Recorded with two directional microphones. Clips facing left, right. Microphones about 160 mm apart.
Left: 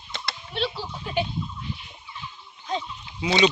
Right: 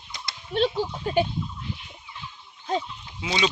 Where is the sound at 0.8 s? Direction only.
45° right (ahead or behind).